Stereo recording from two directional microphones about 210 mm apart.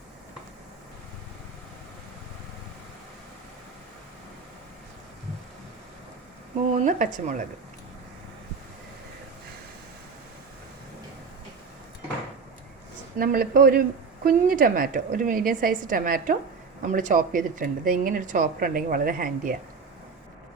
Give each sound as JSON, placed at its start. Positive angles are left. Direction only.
{"t": 6.8, "sound": "speech", "side_deg": -40}
{"t": 13.1, "sound": "speech", "side_deg": -45}